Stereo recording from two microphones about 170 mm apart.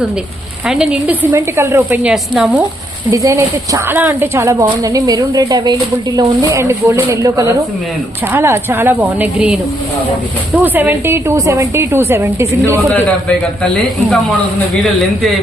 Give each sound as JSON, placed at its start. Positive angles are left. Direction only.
{"t": 0.7, "sound": "a woman's voice", "side_deg": -5}
{"t": 3.1, "sound": "a woman's voice", "side_deg": -20}
{"t": 12.9, "sound": "a man's voice", "side_deg": 5}